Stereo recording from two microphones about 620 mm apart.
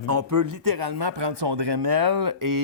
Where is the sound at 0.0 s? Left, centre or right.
Right.